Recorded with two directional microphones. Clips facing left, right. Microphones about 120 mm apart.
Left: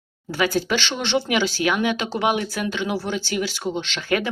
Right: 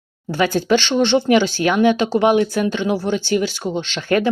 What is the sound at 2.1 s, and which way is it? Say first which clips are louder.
Speech: right 7 dB; 40° right (ahead or behind).